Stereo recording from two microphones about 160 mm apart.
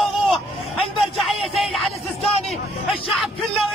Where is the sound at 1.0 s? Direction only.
Centre (ahead or behind).